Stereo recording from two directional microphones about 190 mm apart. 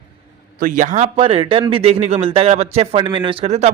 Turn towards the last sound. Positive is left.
turn(degrees=-35)  # may be behind; listen again after turning